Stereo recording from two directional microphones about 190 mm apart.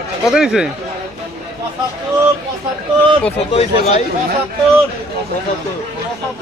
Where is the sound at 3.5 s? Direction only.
30° left (ahead or behind).